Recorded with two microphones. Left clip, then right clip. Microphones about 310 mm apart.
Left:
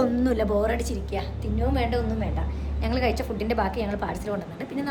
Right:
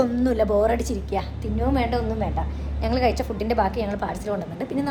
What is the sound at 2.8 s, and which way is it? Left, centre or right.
A woman's voice, centre.